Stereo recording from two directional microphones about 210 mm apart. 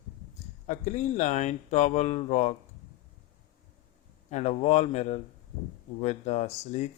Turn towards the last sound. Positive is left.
turn(degrees=35)  # may be behind; listen again after turning